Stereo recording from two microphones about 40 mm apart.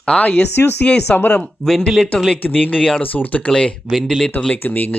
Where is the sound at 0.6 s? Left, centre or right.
Left.